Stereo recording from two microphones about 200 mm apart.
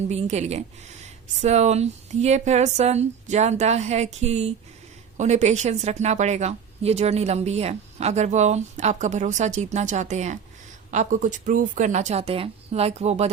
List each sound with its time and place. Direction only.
0.1 s a woman's voice: 35° right (ahead or behind)